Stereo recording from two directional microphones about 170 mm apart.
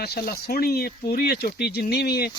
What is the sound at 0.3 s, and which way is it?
Speech, 65° left (ahead or behind).